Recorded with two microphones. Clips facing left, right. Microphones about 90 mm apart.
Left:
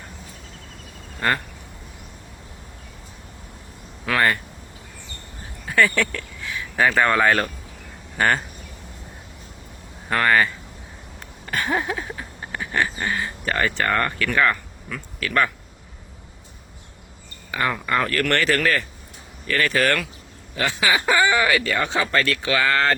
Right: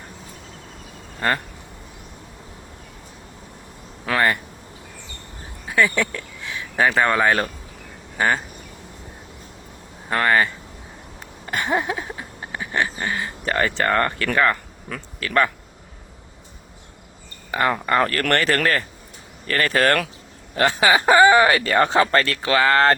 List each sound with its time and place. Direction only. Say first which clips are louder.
4.1 s speech: even; 30° right (ahead or behind)
5.6 s speech: even; 15° right (ahead or behind)
10.1 s speech: even; 30° right (ahead or behind)
11.4 s a sound: right 1 dB; 25° right (ahead or behind)
13.0 s speech: even; 25° right (ahead or behind)
14.8 s speech: even; 45° right (ahead or behind)
17.5 s speech: right 3 dB; 35° right (ahead or behind)